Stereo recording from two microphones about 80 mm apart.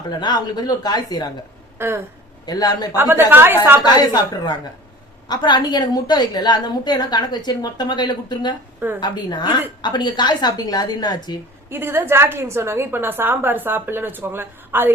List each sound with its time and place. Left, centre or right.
0.2 s a woman's voice: left
1.8 s a woman's voice: right
2.5 s a woman's voice: left
2.9 s a woman's voice: right
3.8 s a woman's voice: left
11.7 s a woman's voice: right